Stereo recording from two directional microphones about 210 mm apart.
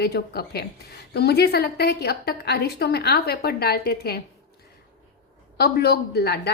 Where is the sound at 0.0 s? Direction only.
50° left (ahead or behind).